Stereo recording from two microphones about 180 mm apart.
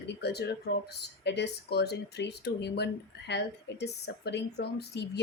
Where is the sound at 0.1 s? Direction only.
65° left (ahead or behind).